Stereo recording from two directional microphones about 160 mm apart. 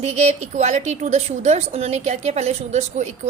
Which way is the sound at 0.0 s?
45° right (ahead or behind).